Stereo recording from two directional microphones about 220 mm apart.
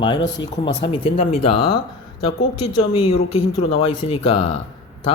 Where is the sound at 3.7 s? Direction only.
25° left (ahead or behind).